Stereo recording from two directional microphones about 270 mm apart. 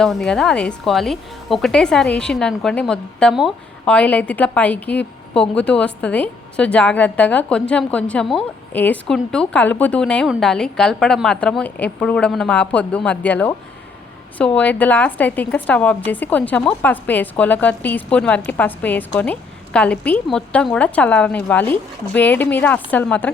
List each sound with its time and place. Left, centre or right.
0.0 s a woman's voice: centre